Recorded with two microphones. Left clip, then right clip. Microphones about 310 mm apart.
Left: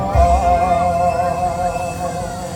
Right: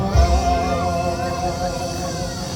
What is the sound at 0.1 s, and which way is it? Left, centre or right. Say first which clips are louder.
Music: left 8 dB; left.